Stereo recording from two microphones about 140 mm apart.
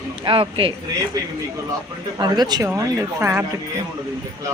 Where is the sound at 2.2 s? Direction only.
30° right (ahead or behind).